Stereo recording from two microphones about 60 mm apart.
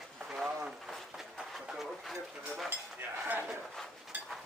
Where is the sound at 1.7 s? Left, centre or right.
Centre.